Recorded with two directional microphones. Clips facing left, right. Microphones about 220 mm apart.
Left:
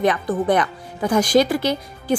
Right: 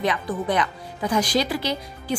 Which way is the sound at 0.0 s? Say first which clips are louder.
Left 5 dB; 50° left (ahead or behind).